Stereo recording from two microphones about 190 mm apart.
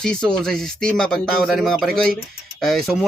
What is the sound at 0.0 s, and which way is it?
Speech, 5° left (ahead or behind).